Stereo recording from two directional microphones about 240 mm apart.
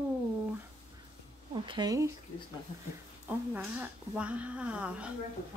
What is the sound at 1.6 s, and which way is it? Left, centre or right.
Speech, centre.